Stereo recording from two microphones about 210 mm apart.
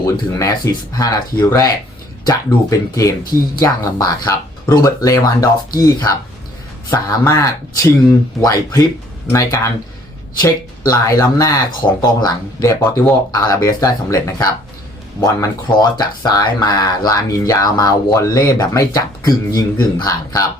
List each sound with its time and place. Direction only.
0.0 s speech: 15° left (ahead or behind)